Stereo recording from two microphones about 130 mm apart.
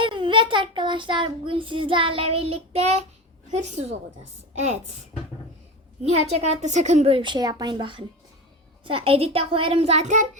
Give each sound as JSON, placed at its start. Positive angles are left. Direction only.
{"t": 0.0, "sound": "child singing", "side_deg": -40}
{"t": 3.5, "sound": "a woman's voice", "side_deg": -60}
{"t": 6.3, "sound": "a woman's voice", "side_deg": -55}